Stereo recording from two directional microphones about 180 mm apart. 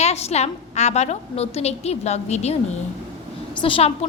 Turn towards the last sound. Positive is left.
turn(degrees=30)  # may be behind; listen again after turning